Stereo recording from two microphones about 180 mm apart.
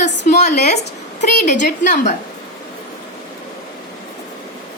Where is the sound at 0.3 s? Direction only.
40° left (ahead or behind).